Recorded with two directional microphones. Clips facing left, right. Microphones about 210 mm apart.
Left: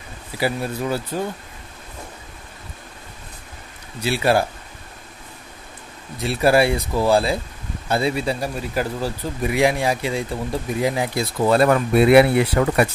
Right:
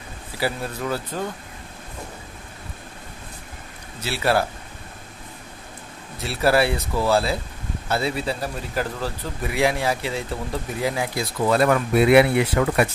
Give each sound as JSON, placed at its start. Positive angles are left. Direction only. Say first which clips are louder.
{"t": 0.4, "sound": "speech", "louder": "left 3 dB", "side_deg": 10}
{"t": 4.0, "sound": "speech", "louder": "left 3 dB", "side_deg": 15}
{"t": 6.1, "sound": "speech", "louder": "left 3 dB", "side_deg": 15}
{"t": 11.5, "sound": "speech", "louder": "left 2 dB", "side_deg": 35}